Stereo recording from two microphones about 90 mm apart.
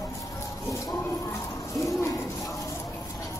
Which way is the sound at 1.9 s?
35° left (ahead or behind).